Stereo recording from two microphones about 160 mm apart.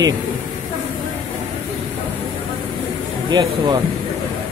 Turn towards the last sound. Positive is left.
turn(degrees=-25)  # may be behind; listen again after turning